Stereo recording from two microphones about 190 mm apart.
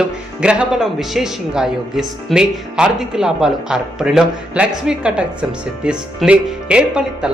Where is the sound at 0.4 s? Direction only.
5° right (ahead or behind).